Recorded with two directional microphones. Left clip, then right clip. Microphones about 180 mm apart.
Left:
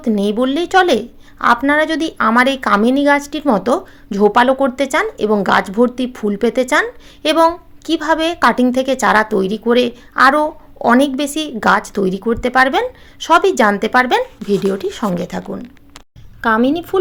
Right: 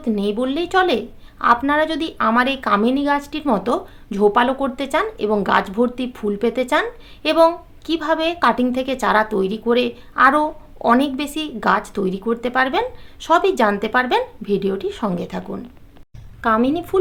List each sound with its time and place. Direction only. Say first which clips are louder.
0.0 s a woman's voice: left 5 dB; 35° left (ahead or behind)